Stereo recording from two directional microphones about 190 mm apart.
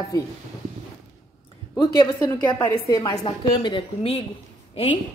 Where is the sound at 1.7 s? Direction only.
15° left (ahead or behind).